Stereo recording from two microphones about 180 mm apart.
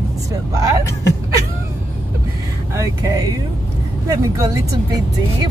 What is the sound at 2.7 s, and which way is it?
Speech, 20° right (ahead or behind).